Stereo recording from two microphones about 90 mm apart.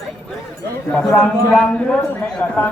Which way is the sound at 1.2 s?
10° left (ahead or behind).